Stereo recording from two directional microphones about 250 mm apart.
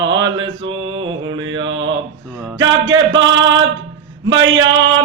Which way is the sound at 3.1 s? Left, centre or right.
Right.